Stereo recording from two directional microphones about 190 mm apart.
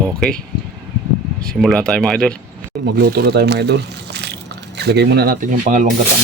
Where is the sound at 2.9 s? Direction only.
55° right (ahead or behind).